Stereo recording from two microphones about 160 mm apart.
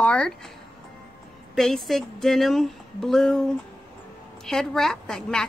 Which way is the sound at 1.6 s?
5° left (ahead or behind).